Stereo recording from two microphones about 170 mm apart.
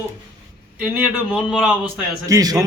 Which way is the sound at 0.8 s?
10° right (ahead or behind).